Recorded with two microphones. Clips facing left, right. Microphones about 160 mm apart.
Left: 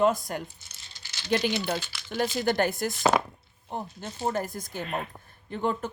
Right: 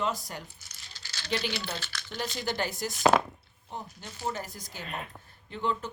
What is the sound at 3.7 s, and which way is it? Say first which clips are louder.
Speech: left 6 dB; 55° left (ahead or behind).